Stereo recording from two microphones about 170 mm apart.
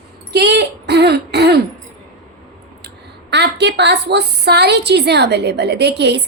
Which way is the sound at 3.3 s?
85° right.